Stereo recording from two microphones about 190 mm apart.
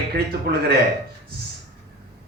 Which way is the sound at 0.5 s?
55° right (ahead or behind).